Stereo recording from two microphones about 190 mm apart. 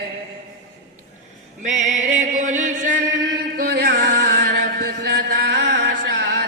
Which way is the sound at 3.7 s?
60° right (ahead or behind).